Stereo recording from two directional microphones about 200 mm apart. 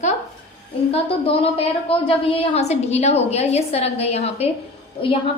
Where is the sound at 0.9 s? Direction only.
30° left (ahead or behind).